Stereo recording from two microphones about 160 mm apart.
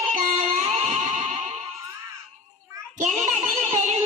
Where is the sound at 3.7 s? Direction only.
45° right (ahead or behind).